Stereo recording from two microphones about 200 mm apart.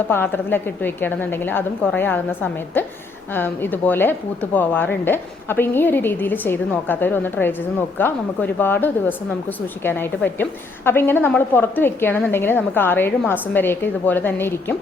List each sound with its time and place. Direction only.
0.1 s a woman's voice: 10° left (ahead or behind)